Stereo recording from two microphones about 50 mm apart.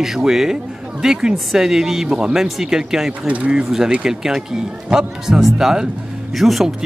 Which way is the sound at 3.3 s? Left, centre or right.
Right.